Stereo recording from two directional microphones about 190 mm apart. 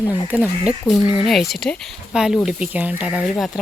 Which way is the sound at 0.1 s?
10° right (ahead or behind).